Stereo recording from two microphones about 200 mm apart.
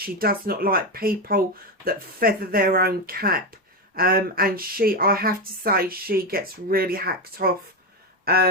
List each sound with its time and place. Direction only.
0.2 s speech: 50° right (ahead or behind)